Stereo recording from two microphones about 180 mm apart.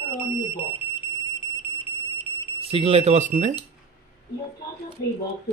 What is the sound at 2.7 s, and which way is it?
Speech, 35° right (ahead or behind).